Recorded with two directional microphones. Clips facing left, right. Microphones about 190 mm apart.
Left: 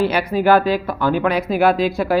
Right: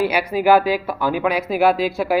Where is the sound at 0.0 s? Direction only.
10° right (ahead or behind).